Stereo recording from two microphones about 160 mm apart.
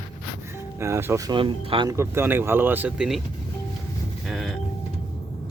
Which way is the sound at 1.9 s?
15° right (ahead or behind).